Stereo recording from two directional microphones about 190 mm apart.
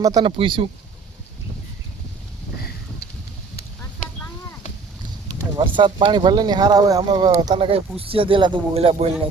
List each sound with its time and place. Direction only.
0.0 s speech: 20° right (ahead or behind)
2.6 s a sound: 55° left (ahead or behind)
5.5 s speech: 25° right (ahead or behind)